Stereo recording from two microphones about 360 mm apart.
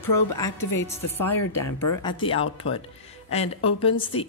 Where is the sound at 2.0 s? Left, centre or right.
Centre.